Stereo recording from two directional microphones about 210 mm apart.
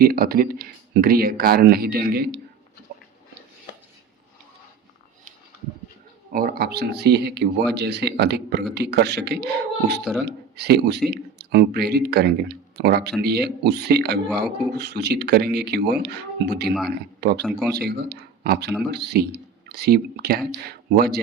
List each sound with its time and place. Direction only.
0.0 s speech: 45° right (ahead or behind)
6.3 s speech: 45° right (ahead or behind)
10.0 s speech: centre (ahead or behind)
10.2 s speech: 50° right (ahead or behind)
17.4 s speech: 5° right (ahead or behind)
17.7 s speech: 50° right (ahead or behind)